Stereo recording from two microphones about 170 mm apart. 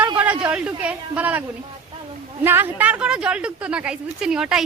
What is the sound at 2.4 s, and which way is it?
A woman's voice, 15° right (ahead or behind).